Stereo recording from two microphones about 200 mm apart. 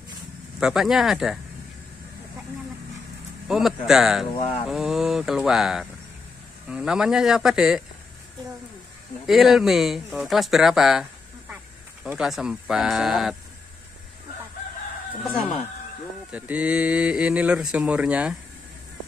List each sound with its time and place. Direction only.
0.6 s speech: 5° right (ahead or behind)
3.4 s speech: centre (ahead or behind)
9.2 s speech: centre (ahead or behind)
16.3 s speech: 5° right (ahead or behind)